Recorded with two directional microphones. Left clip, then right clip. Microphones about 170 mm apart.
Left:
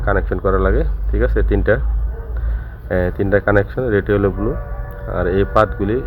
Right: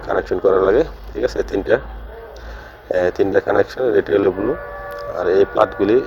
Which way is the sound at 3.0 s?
35° right (ahead or behind).